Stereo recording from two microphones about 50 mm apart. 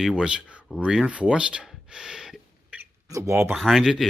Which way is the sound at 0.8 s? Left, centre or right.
Right.